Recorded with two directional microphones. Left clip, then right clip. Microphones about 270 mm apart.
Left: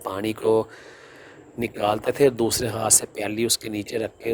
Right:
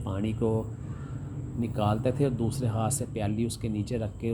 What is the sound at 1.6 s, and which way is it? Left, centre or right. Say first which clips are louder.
Speech: left 6 dB; left.